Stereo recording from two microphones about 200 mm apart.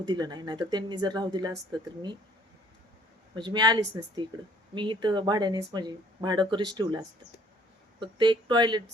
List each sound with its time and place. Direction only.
0.0 s speech: 20° right (ahead or behind)
3.3 s speech: 20° right (ahead or behind)